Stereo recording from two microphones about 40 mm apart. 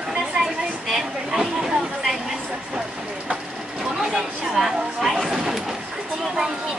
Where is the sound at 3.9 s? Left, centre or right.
Centre.